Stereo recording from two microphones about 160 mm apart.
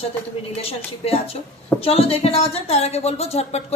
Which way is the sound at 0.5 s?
40° left (ahead or behind).